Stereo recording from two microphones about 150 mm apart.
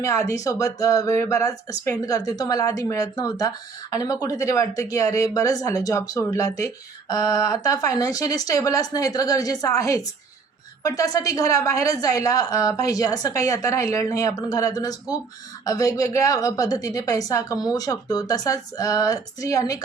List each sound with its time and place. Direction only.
0.0 s speech: 20° left (ahead or behind)